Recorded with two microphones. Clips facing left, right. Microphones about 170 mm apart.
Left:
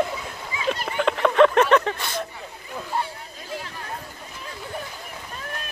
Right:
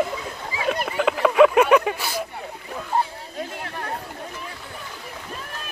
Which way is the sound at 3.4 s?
60° right (ahead or behind).